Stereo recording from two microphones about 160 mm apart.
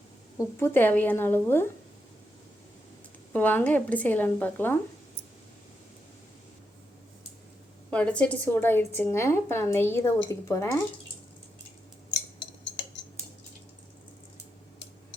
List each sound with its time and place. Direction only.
0.3 s a woman's voice: 15° left (ahead or behind)
3.3 s a woman's voice: 10° left (ahead or behind)
7.9 s a woman's voice: 5° left (ahead or behind)